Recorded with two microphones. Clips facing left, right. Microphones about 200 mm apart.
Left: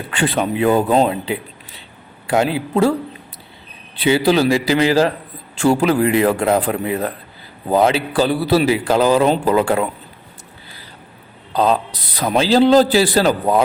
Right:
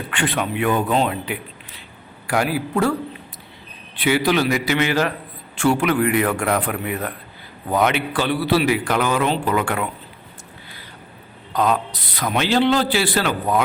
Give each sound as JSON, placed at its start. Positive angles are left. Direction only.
{"t": 0.1, "sound": "a man's voice", "side_deg": 35}
{"t": 3.9, "sound": "a man's voice", "side_deg": 30}
{"t": 11.5, "sound": "a man's voice", "side_deg": 30}